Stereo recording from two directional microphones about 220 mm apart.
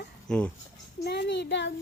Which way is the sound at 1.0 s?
50° left (ahead or behind).